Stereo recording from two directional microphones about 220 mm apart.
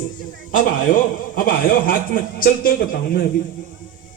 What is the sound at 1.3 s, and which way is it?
A man's voice, 40° left (ahead or behind).